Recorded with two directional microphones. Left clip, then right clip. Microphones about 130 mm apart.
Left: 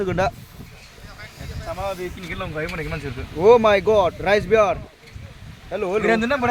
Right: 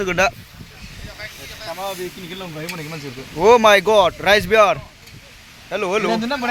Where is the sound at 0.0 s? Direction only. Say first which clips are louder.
Right 4 dB; 15° left (ahead or behind).